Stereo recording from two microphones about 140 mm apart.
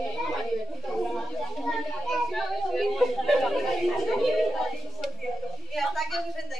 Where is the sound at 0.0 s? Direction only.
Centre (ahead or behind).